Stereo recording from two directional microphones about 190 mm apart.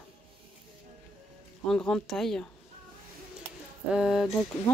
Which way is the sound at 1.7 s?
5° left (ahead or behind).